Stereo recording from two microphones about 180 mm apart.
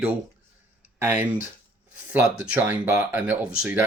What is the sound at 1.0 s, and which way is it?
Speech, 10° right (ahead or behind).